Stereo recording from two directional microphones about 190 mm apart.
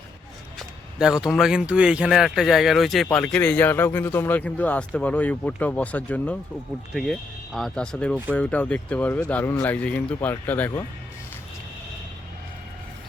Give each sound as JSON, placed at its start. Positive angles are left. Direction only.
{"t": 0.9, "sound": "speech", "side_deg": -5}